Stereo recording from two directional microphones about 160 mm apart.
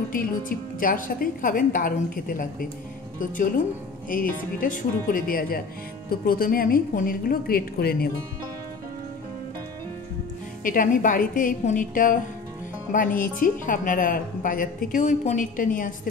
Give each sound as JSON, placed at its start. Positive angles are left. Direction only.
{"t": 0.1, "sound": "a woman's voice", "side_deg": 60}
{"t": 10.6, "sound": "a woman's voice", "side_deg": 55}